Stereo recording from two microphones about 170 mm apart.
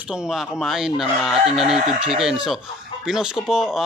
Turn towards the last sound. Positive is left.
turn(degrees=-5)  # may be behind; listen again after turning